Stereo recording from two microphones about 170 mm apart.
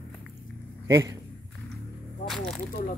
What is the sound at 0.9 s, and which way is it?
Speech, 15° right (ahead or behind).